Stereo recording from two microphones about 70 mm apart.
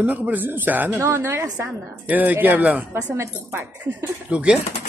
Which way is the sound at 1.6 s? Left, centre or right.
Right.